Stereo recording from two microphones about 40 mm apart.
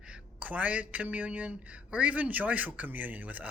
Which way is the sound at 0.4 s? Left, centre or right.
Right.